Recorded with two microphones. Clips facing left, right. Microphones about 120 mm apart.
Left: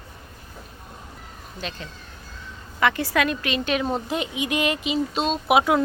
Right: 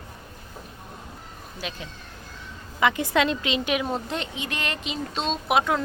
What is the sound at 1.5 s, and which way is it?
Speech, 10° right (ahead or behind).